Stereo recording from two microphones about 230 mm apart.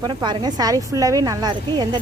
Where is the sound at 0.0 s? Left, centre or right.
Centre.